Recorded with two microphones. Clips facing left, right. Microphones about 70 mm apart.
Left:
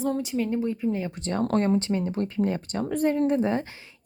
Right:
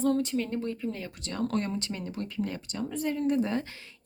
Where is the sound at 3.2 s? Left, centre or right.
Left.